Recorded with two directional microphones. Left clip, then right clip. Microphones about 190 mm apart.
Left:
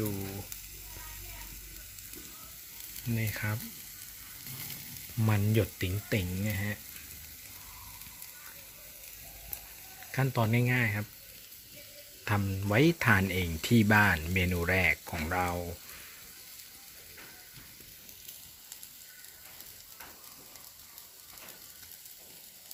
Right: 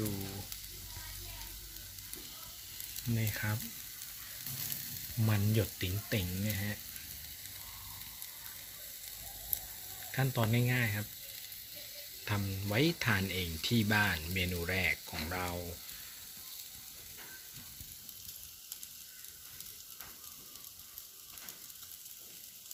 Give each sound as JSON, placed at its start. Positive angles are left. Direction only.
{"t": 3.2, "sound": "speech", "side_deg": 10}
{"t": 5.2, "sound": "speech", "side_deg": 15}
{"t": 10.1, "sound": "speech", "side_deg": 15}
{"t": 12.2, "sound": "speech", "side_deg": 20}